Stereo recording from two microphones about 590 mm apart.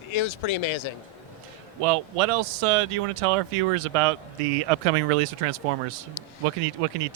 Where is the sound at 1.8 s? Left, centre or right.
Right.